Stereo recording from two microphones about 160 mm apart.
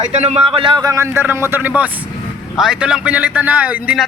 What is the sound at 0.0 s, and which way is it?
Speech, 45° right (ahead or behind).